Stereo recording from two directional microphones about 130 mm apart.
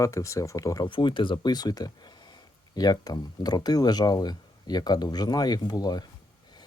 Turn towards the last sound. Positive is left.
turn(degrees=30)  # may be behind; listen again after turning